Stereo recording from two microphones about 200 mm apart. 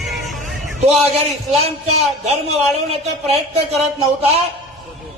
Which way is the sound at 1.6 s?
35° right (ahead or behind).